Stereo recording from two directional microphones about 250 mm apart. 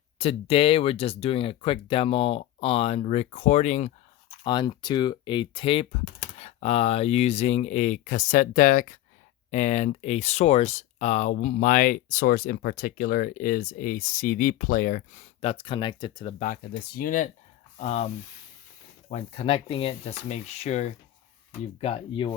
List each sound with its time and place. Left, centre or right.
0.2 s speech: left
4.4 s speech: centre
16.4 s speech: left